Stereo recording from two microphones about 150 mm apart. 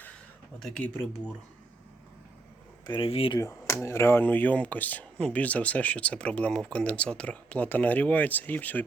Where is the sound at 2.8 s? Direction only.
30° left (ahead or behind).